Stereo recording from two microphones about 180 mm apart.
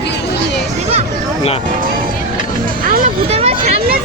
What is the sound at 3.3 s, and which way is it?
Vehicle, 35° right (ahead or behind).